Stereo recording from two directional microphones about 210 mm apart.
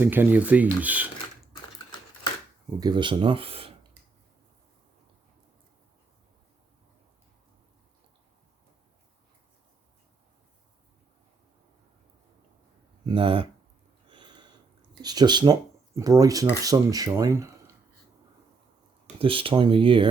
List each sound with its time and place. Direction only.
0.0 s speech: 10° right (ahead or behind)
2.8 s speech: 20° right (ahead or behind)
13.1 s speech: 25° right (ahead or behind)
14.1 s a sound: 20° right (ahead or behind)
16.0 s speech: 15° right (ahead or behind)
19.2 s speech: 25° right (ahead or behind)